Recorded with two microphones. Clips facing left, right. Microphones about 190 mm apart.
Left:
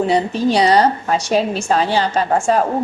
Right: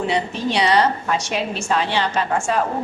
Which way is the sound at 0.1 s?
40° left (ahead or behind).